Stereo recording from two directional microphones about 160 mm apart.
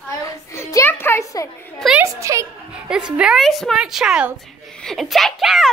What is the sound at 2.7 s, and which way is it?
Speech, 5° right (ahead or behind).